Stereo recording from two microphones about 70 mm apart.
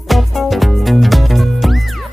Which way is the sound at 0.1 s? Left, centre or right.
Centre.